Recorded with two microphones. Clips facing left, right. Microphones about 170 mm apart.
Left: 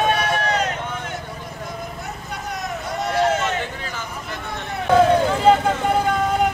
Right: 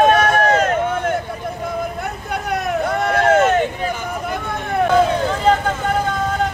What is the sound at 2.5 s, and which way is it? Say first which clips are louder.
Vehicle: right 8 dB; 60° right (ahead or behind).